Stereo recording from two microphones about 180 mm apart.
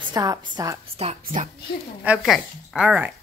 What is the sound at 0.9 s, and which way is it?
Speech, 35° right (ahead or behind).